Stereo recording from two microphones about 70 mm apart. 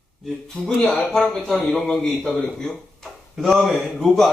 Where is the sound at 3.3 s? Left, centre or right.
Centre.